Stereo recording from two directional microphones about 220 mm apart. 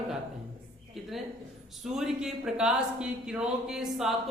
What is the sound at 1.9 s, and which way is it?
Speech, centre (ahead or behind).